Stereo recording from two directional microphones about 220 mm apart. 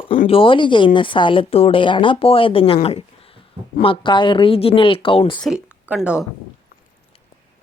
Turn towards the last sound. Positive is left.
turn(degrees=-5)  # may be behind; listen again after turning